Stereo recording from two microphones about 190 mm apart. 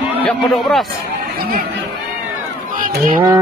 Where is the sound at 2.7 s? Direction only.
45° right (ahead or behind).